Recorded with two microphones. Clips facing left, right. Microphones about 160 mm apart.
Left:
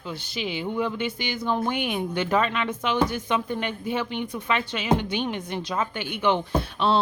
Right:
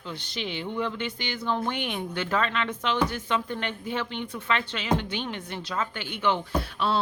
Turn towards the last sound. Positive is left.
turn(degrees=25)  # may be behind; listen again after turning